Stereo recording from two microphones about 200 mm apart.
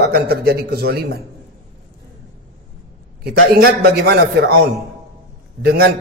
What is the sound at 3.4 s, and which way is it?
A man's voice, 50° right (ahead or behind).